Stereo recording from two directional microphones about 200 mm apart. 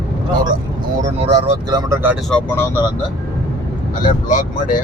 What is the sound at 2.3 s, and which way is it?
Speech, 10° left (ahead or behind).